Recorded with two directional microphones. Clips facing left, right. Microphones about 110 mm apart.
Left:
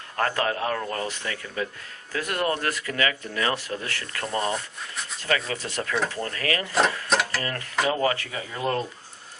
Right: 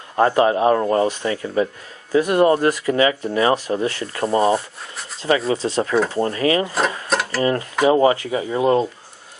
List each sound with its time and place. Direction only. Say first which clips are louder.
0.2 s speech: right 10 dB; 20° right (ahead or behind)
7.1 s a sound: right 2 dB; centre (ahead or behind)
7.3 s speech: right 9 dB; 25° right (ahead or behind)